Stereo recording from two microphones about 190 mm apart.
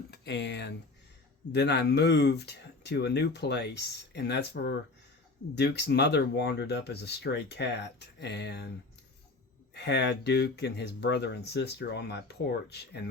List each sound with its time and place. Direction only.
0.1 s speech: 65° left (ahead or behind)
9.7 s speech: 60° left (ahead or behind)